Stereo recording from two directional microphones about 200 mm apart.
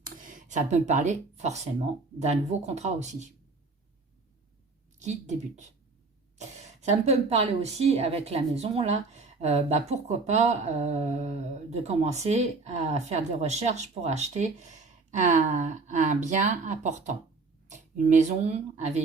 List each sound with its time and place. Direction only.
0.0 s a woman's voice: 40° right (ahead or behind)
4.9 s a woman's voice: 35° right (ahead or behind)
6.8 s a woman's voice: 35° right (ahead or behind)